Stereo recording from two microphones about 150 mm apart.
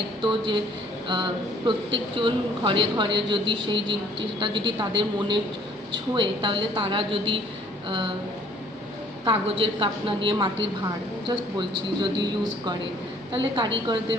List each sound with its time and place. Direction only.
0.2 s speech: 35° right (ahead or behind)
9.2 s speech: 35° right (ahead or behind)